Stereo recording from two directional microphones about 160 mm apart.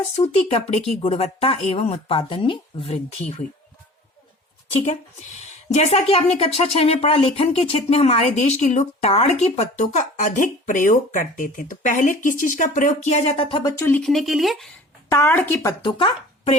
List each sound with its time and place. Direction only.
0.2 s speech: 35° left (ahead or behind)
5.7 s speech: 40° left (ahead or behind)
13.7 s speech: 15° left (ahead or behind)
14.0 s speech: centre (ahead or behind)
15.1 s speech: 15° left (ahead or behind)
15.8 s speech: 30° left (ahead or behind)